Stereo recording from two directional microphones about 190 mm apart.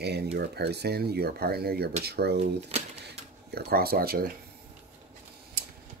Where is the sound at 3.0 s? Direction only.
60° right (ahead or behind).